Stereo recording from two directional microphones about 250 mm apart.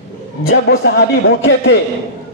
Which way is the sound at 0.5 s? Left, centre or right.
Left.